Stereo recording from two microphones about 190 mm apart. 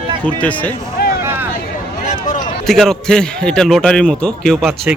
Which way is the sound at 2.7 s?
Centre (ahead or behind).